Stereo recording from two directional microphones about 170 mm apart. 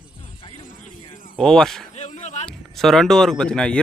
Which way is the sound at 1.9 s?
40° left (ahead or behind).